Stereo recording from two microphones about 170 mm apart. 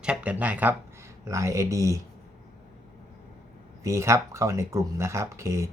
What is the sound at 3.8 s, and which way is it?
Speech, 15° right (ahead or behind).